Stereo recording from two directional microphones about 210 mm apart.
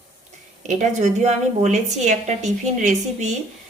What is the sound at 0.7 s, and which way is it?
A woman's voice, 35° right (ahead or behind).